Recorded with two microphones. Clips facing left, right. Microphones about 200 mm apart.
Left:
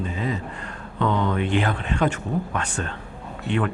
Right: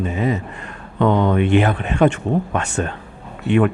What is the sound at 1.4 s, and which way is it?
Speech, 20° right (ahead or behind).